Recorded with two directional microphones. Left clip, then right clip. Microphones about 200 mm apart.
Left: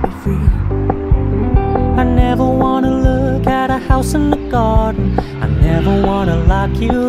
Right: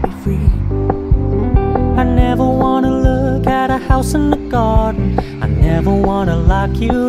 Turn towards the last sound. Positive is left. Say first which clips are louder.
# even
turn(degrees=0)  # may be behind; listen again after turning